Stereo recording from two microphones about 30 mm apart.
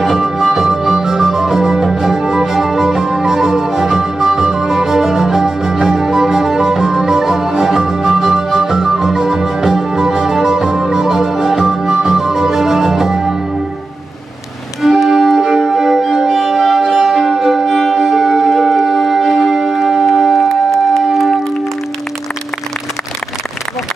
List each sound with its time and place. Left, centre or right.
0.0 s music: centre
14.8 s music: centre
20.4 s music: centre